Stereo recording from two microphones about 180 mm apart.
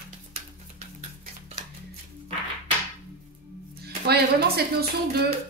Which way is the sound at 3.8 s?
60° right (ahead or behind).